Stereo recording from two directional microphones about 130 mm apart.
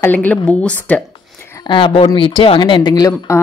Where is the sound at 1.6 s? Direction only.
40° left (ahead or behind); by 3.4 s 20° left (ahead or behind).